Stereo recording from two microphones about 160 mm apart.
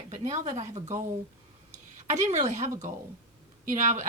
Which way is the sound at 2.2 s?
50° right (ahead or behind).